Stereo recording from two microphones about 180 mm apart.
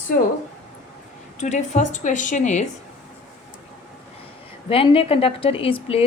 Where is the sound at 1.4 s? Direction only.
40° left (ahead or behind).